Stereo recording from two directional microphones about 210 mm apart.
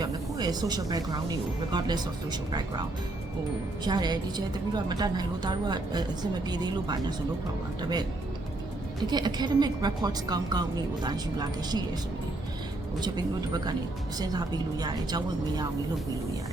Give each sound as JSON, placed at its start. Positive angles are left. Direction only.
{"t": 0.0, "sound": "speech", "side_deg": -20}
{"t": 3.8, "sound": "speech", "side_deg": -20}
{"t": 9.0, "sound": "speech", "side_deg": -20}
{"t": 13.0, "sound": "speech", "side_deg": -20}